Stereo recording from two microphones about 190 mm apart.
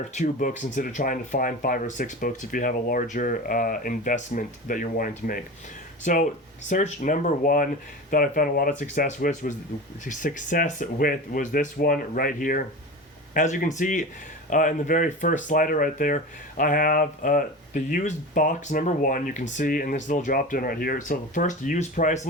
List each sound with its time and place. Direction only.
0.1 s speech: 40° left (ahead or behind)
6.7 s speech: 40° left (ahead or behind)